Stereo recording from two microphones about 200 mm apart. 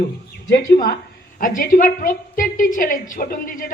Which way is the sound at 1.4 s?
45° left (ahead or behind).